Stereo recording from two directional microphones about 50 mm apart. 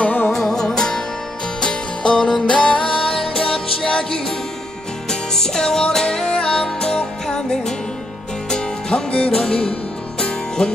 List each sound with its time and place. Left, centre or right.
0.0 s music: left
0.3 s music: centre
5.3 s music: centre